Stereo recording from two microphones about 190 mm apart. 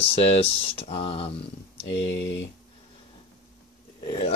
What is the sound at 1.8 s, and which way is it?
Speech, 75° left (ahead or behind).